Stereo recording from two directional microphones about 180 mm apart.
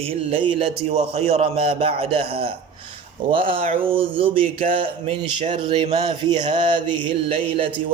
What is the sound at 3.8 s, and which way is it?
Speech, 30° right (ahead or behind).